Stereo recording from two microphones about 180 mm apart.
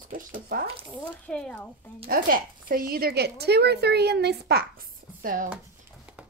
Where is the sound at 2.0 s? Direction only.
50° right (ahead or behind).